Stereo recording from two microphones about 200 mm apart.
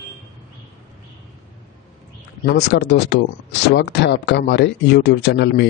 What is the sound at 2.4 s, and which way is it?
Speech, 55° left (ahead or behind).